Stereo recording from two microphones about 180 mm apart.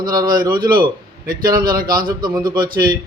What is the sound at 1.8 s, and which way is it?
Speech, 25° right (ahead or behind).